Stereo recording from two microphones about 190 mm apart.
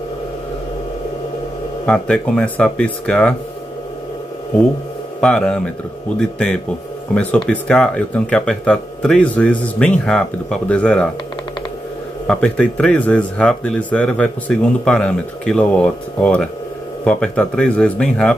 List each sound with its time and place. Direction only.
1.9 s speech: 5° left (ahead or behind)
5.2 s speech: 5° left (ahead or behind)
12.3 s speech: 5° left (ahead or behind)